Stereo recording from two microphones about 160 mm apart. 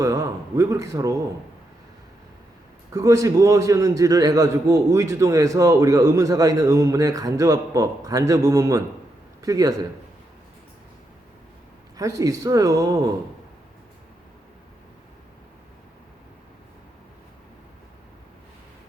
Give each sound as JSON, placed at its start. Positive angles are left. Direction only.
{"t": 0.0, "sound": "a man's voice", "side_deg": -20}
{"t": 2.9, "sound": "a man's voice", "side_deg": -20}
{"t": 11.9, "sound": "a man's voice", "side_deg": -20}